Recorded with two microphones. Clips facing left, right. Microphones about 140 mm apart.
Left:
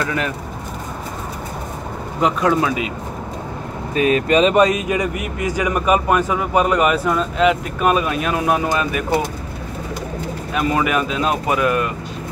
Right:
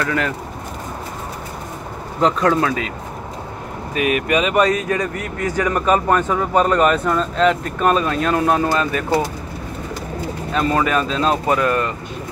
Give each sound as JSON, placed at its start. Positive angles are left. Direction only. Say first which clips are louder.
{"t": 0.0, "sound": "speech", "louder": "right 1 dB", "side_deg": 20}
{"t": 2.2, "sound": "speech", "louder": "right 1 dB", "side_deg": 15}
{"t": 3.9, "sound": "speech", "louder": "left 3 dB", "side_deg": 30}
{"t": 10.5, "sound": "speech", "louder": "right 1 dB", "side_deg": 10}